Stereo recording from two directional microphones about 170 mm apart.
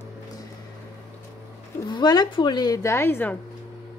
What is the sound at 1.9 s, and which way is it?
Speech, 25° left (ahead or behind).